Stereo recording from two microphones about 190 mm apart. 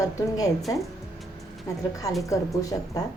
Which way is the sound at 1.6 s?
15° left (ahead or behind).